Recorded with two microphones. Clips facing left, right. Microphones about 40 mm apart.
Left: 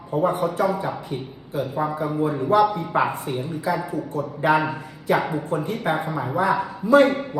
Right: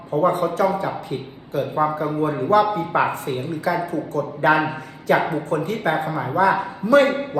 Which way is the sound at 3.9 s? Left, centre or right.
Right.